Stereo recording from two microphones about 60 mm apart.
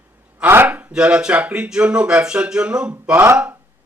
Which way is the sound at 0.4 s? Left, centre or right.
Right.